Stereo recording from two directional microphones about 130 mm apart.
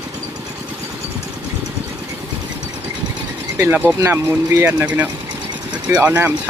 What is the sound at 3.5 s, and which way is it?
Speech, 15° right (ahead or behind).